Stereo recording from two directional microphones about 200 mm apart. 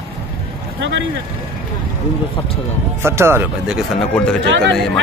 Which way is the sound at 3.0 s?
10° right (ahead or behind).